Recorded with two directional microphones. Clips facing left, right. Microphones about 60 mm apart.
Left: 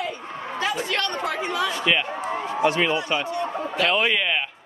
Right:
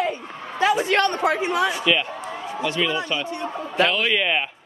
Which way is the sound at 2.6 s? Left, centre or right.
Left.